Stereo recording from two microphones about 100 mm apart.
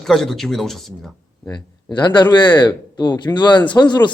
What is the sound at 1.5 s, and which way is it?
Speech, 50° left (ahead or behind).